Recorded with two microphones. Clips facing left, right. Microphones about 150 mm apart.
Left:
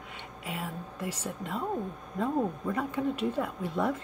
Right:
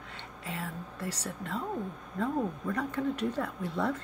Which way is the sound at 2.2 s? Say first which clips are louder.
Left 2 dB; 15° left (ahead or behind).